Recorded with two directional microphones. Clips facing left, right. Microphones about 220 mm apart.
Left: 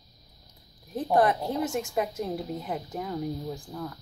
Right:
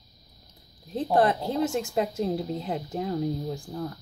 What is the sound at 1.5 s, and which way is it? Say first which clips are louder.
Speech: right 2 dB; 25° right (ahead or behind).